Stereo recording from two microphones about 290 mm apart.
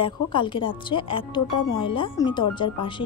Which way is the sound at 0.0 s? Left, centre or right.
Centre.